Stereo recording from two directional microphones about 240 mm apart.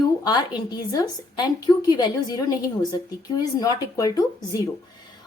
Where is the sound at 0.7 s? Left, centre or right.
Centre.